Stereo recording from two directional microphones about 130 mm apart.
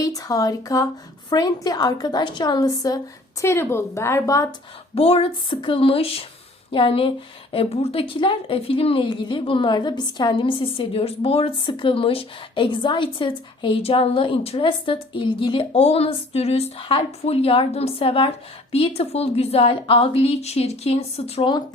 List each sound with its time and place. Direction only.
0.0 s a woman's voice: 25° left (ahead or behind)
4.9 s a woman's voice: 50° left (ahead or behind)